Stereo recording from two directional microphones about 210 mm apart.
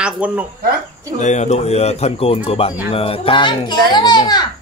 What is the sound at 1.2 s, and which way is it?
A child's voice, 35° left (ahead or behind).